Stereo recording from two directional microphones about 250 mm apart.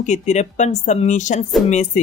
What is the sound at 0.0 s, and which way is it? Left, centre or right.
Speech, left.